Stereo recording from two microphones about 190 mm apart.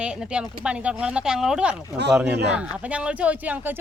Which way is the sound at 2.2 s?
60° right (ahead or behind).